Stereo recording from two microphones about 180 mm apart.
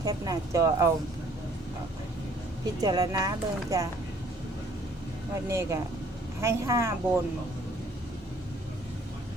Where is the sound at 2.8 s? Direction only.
20° right (ahead or behind).